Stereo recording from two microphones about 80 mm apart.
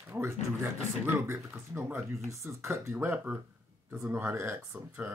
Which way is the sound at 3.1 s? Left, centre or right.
Centre.